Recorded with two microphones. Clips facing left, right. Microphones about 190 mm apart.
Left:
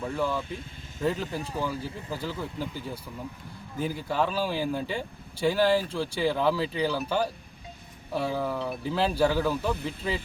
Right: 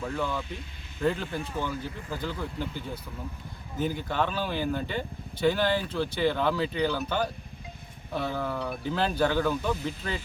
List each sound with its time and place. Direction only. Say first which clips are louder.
0.0 s speech: left 2 dB; 10° left (ahead or behind)
1.2 s speech: left 1 dB; 40° left (ahead or behind)
2.0 s speech: even; 5° left (ahead or behind)